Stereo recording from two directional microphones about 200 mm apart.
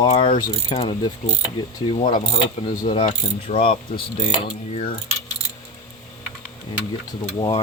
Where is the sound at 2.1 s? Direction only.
45° left (ahead or behind).